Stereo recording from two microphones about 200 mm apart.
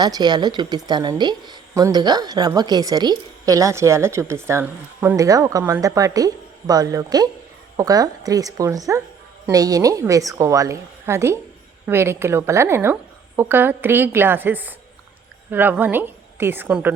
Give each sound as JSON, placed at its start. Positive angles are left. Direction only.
{"t": 0.0, "sound": "a woman's voice", "side_deg": -20}